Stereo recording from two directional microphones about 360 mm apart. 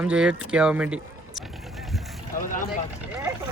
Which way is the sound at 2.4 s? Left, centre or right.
Left.